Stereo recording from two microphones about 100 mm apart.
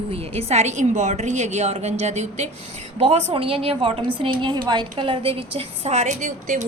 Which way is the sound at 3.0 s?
70° right (ahead or behind).